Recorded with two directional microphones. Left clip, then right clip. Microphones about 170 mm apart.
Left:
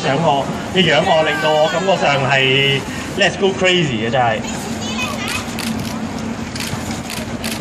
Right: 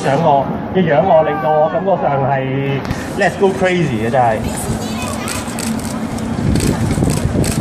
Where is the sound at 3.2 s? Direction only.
20° right (ahead or behind).